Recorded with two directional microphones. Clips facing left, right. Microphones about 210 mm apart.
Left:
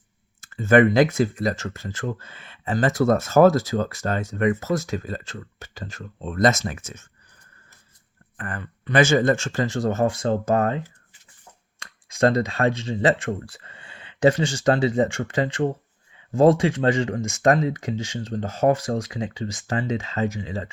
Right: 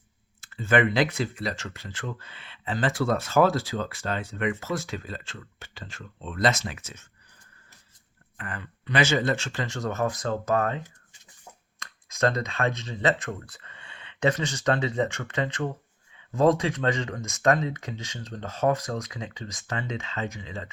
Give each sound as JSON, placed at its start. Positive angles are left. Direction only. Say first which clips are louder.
{"t": 0.4, "sound": "speech", "louder": "left 7 dB", "side_deg": 45}
{"t": 8.4, "sound": "speech", "louder": "left 4 dB", "side_deg": 50}
{"t": 11.8, "sound": "speech", "louder": "left 5 dB", "side_deg": 30}